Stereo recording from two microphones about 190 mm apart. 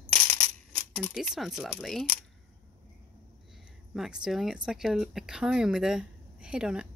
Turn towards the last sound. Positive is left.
turn(degrees=-5)  # may be behind; listen again after turning